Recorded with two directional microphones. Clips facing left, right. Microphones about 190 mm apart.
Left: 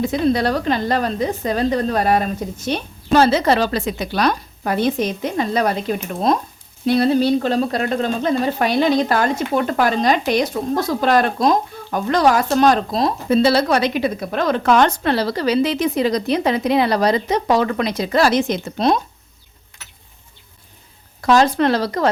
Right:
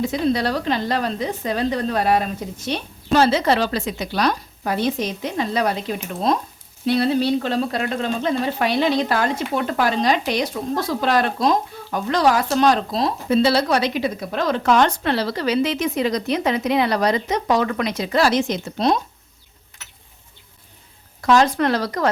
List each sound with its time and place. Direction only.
0.0 s a woman's voice: 50° left (ahead or behind)
21.2 s speech: 35° left (ahead or behind)